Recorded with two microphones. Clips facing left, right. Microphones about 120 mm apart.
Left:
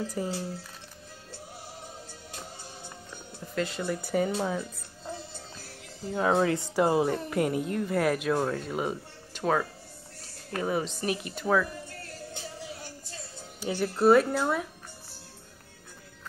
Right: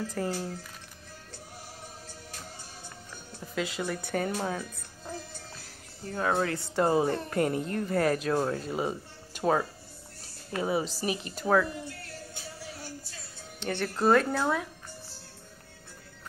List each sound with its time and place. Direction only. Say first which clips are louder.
0.0 s speech: even; 10° left (ahead or behind)
3.5 s speech: left 2 dB; centre (ahead or behind)
6.1 s speech: left 4 dB; 15° left (ahead or behind); by 8.9 s centre (ahead or behind)
9.3 s speech: right 1 dB; 10° right (ahead or behind)
10.8 s speech: left 1 dB; 5° right (ahead or behind)
12.4 s music: left 3 dB; 20° left (ahead or behind)
13.9 s speech: left 3 dB; 5° left (ahead or behind)